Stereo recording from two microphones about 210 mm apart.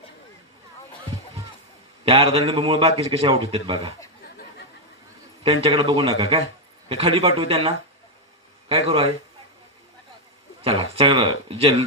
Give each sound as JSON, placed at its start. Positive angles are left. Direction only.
{"t": 2.0, "sound": "a man's voice", "side_deg": -30}
{"t": 4.2, "sound": "chatter", "side_deg": 45}
{"t": 5.4, "sound": "a man's voice", "side_deg": -25}
{"t": 8.7, "sound": "a man's voice", "side_deg": -25}
{"t": 10.6, "sound": "a man's voice", "side_deg": -30}